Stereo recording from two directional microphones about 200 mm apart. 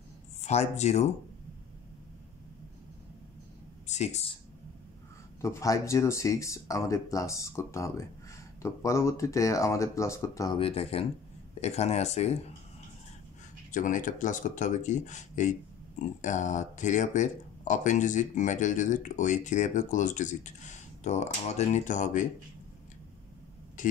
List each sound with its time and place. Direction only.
0.4 s speech: 35° left (ahead or behind)
3.8 s speech: 35° left (ahead or behind)
5.4 s speech: 15° left (ahead or behind)
10.6 s speech: 30° left (ahead or behind)
13.7 s speech: 40° left (ahead or behind)
23.8 s a sound: 40° left (ahead or behind)